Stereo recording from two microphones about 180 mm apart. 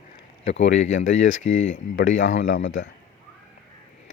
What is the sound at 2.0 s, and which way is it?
Speech, 90° left.